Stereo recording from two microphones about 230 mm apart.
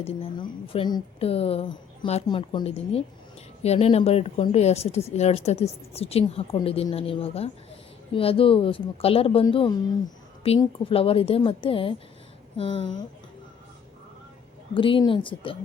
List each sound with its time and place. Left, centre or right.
0.0 s speech: left
14.7 s speech: left